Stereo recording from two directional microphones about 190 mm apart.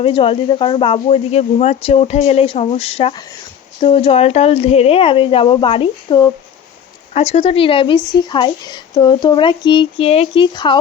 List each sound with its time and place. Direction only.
0.0 s speech: 30° left (ahead or behind)